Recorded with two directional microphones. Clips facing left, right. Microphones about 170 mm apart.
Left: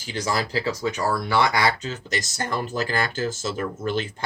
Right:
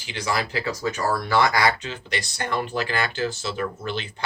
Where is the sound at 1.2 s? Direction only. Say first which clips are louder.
Right 1 dB; 15° left (ahead or behind).